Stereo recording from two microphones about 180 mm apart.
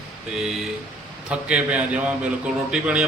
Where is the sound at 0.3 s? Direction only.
5° right (ahead or behind).